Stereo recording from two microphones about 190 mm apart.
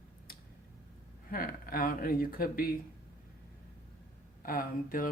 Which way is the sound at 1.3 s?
50° left (ahead or behind).